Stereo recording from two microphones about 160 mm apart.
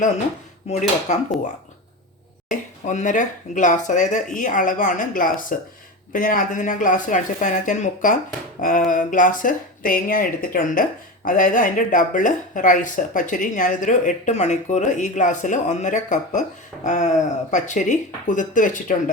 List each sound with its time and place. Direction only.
0.7 s speech: 50° left (ahead or behind)
2.5 s speech: 50° left (ahead or behind)